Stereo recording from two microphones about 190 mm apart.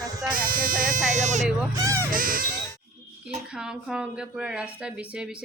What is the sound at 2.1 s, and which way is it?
Speech, 45° right (ahead or behind).